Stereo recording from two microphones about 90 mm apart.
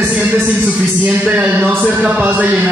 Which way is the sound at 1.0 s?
15° right (ahead or behind).